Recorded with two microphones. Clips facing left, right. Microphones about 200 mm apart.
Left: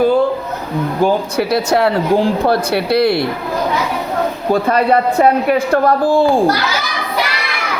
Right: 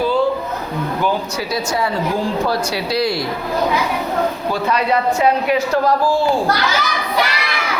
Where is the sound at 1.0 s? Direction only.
60° left (ahead or behind).